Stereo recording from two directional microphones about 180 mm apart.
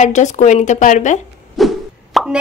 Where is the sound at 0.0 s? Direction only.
40° left (ahead or behind).